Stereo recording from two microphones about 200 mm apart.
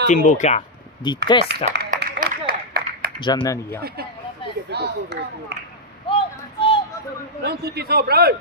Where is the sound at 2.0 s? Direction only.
50° right (ahead or behind).